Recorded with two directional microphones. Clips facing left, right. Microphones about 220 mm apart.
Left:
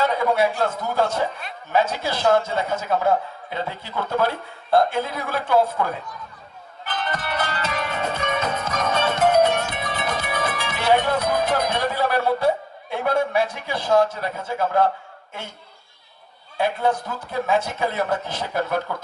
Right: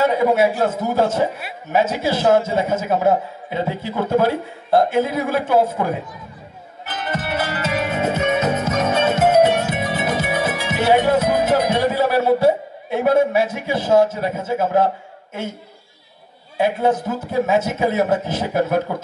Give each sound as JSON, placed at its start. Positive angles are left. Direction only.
{"t": 0.0, "sound": "a man's voice", "side_deg": -10}
{"t": 6.9, "sound": "music", "side_deg": -10}
{"t": 8.5, "sound": "music", "side_deg": -25}
{"t": 9.1, "sound": "music", "side_deg": -10}
{"t": 16.5, "sound": "a man's voice", "side_deg": -10}